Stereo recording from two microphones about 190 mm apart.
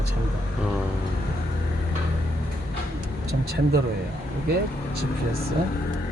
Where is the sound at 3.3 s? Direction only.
55° right (ahead or behind).